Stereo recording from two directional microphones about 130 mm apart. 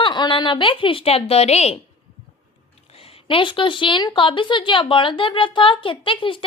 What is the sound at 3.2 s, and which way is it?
A woman's voice, 40° left (ahead or behind).